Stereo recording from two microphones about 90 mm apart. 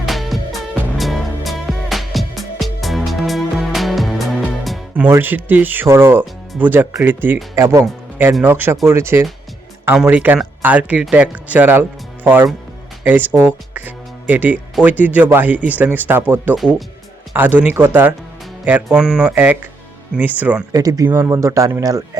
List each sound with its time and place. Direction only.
0.0 s music: centre (ahead or behind)
4.9 s speech: 25° right (ahead or behind)
9.9 s speech: 15° right (ahead or behind)
18.9 s speech: 10° right (ahead or behind)
19.3 s speech: 20° right (ahead or behind)
20.7 s a man's voice: 45° right (ahead or behind)